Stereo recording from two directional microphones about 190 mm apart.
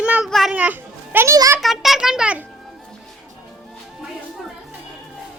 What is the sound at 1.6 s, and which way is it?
Speech, centre (ahead or behind).